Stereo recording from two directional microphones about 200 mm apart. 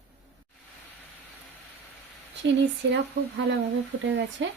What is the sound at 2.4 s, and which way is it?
Speech, 65° right (ahead or behind).